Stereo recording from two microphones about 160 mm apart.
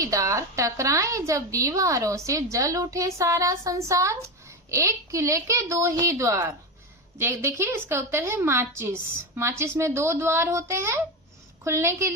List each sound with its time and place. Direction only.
0.0 s a woman's voice: 20° right (ahead or behind)